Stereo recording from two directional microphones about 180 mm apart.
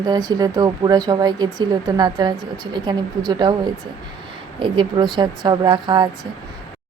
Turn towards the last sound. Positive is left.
turn(degrees=-25)  # may be behind; listen again after turning